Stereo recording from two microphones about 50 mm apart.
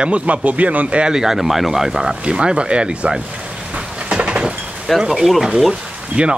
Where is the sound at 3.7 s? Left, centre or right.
Centre.